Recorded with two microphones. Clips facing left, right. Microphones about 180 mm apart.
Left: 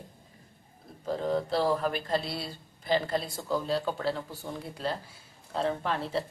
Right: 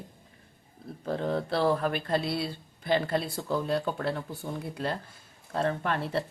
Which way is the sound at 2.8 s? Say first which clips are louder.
Right 1 dB; 55° right (ahead or behind).